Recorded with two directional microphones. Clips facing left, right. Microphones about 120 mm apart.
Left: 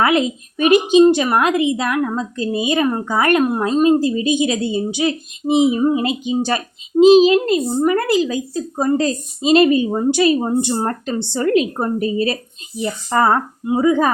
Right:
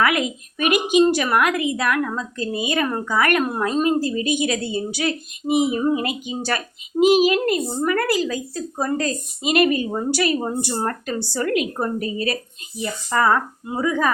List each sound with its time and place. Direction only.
0.0 s speech: 25° left (ahead or behind)
13.7 s speech: 20° left (ahead or behind)